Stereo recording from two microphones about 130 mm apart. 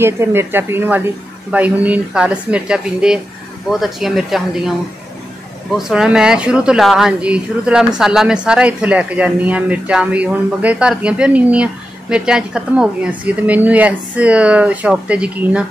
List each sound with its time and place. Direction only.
0.0 s speech: 20° right (ahead or behind); by 4.7 s 5° right (ahead or behind)
5.8 s speech: 5° right (ahead or behind)